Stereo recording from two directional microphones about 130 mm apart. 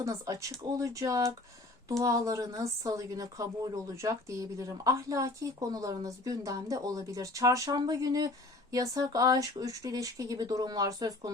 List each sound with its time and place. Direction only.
0.0 s speech: 25° right (ahead or behind)